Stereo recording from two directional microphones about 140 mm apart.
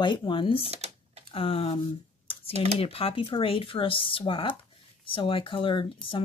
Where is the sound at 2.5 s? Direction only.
45° right (ahead or behind).